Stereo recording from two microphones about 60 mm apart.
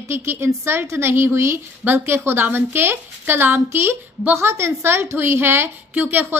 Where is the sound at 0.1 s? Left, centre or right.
Right.